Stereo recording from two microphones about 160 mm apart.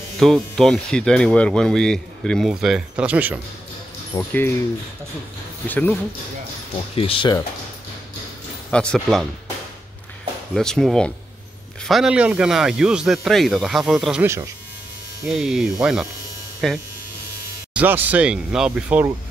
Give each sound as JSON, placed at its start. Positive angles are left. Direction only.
{"t": 0.2, "sound": "speech", "side_deg": 0}
{"t": 4.2, "sound": "speech", "side_deg": 10}
{"t": 5.7, "sound": "speech", "side_deg": 10}
{"t": 7.0, "sound": "speech", "side_deg": 35}
{"t": 8.6, "sound": "speech", "side_deg": 5}
{"t": 10.5, "sound": "speech", "side_deg": 5}
{"t": 14.2, "sound": "speech", "side_deg": -15}
{"t": 15.2, "sound": "speech", "side_deg": 0}
{"t": 17.7, "sound": "speech", "side_deg": -10}